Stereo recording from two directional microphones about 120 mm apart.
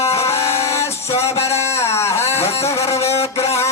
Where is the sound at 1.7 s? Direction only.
20° left (ahead or behind).